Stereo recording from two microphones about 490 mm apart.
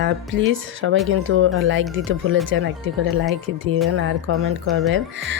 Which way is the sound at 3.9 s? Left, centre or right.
Right.